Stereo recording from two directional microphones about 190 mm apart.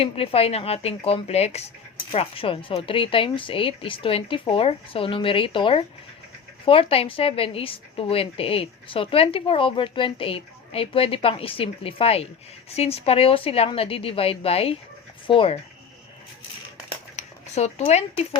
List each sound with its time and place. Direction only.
0.0 s a woman's voice: 30° left (ahead or behind)
17.2 s speech: 35° left (ahead or behind)